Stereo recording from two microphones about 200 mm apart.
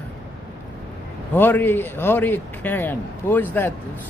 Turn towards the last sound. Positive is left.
turn(degrees=10)  # may be behind; listen again after turning